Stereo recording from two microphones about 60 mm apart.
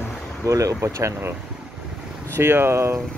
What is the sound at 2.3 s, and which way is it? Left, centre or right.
Speech, right.